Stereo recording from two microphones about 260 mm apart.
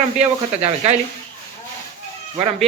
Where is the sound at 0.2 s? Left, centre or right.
Right.